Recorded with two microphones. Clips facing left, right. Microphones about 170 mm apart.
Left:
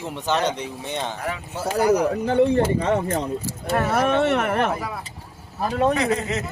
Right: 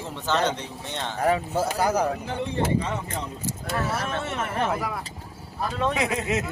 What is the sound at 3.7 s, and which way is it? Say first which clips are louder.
Speech: left 9 dB; 65° left (ahead or behind).